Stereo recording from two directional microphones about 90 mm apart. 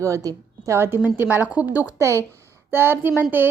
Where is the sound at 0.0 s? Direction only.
40° right (ahead or behind).